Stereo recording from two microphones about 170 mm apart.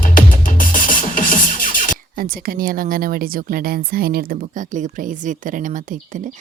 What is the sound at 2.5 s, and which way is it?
Speech, 55° right (ahead or behind).